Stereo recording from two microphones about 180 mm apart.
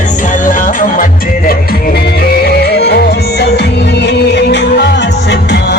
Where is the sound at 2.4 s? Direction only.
65° left (ahead or behind).